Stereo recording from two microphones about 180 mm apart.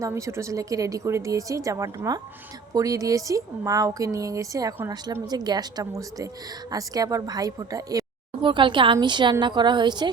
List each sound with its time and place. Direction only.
0.0 s speech: 15° right (ahead or behind)